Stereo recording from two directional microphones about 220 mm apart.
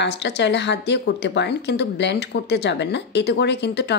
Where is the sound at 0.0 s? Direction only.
50° left (ahead or behind).